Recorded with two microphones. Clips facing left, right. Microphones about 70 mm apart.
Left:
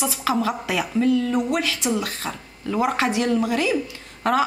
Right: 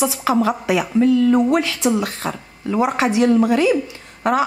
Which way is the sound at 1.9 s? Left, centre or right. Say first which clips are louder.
Right 4 dB; right.